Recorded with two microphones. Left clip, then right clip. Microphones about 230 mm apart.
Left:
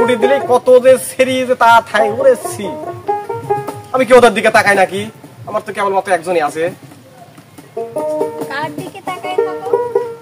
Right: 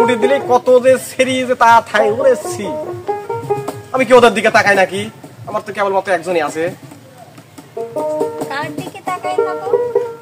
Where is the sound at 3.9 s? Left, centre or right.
Centre.